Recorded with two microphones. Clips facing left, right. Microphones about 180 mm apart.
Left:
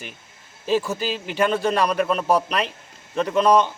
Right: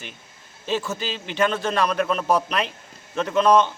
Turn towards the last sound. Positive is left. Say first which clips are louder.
# even
turn(degrees=10)  # may be behind; listen again after turning